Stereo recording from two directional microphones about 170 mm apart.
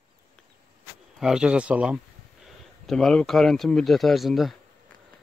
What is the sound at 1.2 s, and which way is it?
Speech, 5° right (ahead or behind).